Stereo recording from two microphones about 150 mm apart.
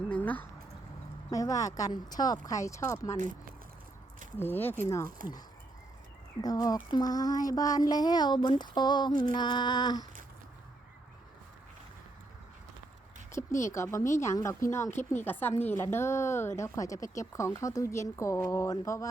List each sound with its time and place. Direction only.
0.1 s a sound: 10° left (ahead or behind)
1.3 s a woman's voice: 20° left (ahead or behind)
4.4 s speech: 15° left (ahead or behind)
6.4 s a woman's voice: 25° left (ahead or behind)
13.3 s a woman's voice: 20° left (ahead or behind)